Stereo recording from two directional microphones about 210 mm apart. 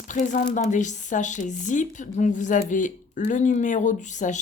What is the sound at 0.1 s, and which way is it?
Speech, 35° left (ahead or behind).